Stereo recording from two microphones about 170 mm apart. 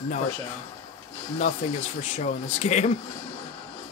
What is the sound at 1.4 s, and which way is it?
Speech, 45° left (ahead or behind).